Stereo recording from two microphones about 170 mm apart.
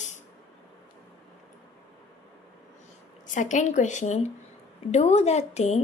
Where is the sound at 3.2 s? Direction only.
50° left (ahead or behind).